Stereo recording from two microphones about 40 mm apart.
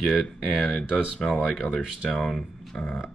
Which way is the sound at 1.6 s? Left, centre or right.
Left.